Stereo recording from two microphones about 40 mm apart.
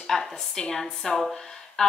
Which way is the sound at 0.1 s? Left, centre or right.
Centre.